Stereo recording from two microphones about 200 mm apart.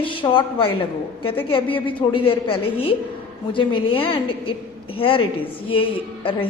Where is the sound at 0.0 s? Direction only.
25° left (ahead or behind).